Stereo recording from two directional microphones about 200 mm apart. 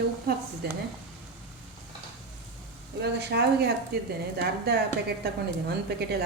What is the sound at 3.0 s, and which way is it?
Speech, 55° right (ahead or behind).